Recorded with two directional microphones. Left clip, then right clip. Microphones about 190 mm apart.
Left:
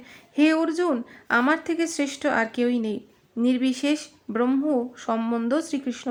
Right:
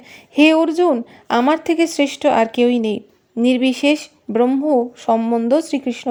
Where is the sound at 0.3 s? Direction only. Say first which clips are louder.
Right 8 dB; 35° right (ahead or behind).